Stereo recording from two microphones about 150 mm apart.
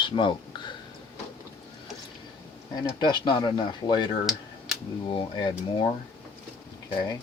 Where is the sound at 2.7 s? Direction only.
30° left (ahead or behind).